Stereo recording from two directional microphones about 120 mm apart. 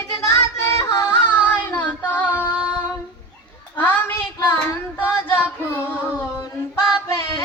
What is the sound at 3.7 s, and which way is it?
Child singing, 15° left (ahead or behind).